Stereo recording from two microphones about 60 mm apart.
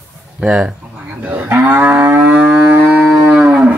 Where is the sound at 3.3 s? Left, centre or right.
Centre.